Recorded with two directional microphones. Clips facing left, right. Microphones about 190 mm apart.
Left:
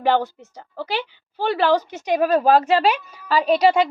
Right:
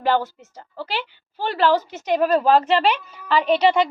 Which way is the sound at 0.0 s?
15° left (ahead or behind).